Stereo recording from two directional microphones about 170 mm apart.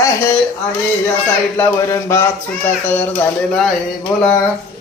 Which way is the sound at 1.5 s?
15° left (ahead or behind).